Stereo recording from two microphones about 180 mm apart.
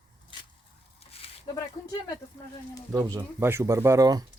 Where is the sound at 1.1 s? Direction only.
35° left (ahead or behind).